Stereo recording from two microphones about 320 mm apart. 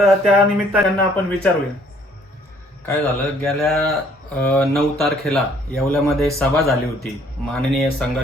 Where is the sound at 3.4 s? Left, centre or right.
Centre.